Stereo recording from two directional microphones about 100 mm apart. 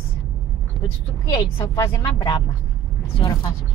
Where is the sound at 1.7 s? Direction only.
30° left (ahead or behind).